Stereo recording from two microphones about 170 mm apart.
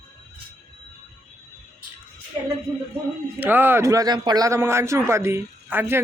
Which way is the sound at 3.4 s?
10° right (ahead or behind).